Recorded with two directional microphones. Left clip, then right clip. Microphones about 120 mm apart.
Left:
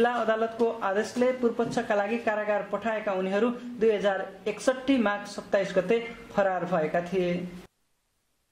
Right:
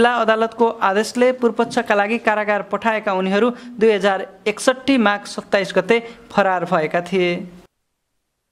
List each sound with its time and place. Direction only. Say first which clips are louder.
0.0 s speech: right 9 dB; 45° right (ahead or behind)